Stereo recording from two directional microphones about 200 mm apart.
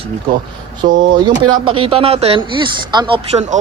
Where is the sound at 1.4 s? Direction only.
25° right (ahead or behind).